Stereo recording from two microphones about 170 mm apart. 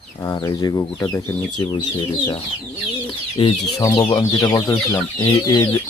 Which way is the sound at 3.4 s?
25° left (ahead or behind).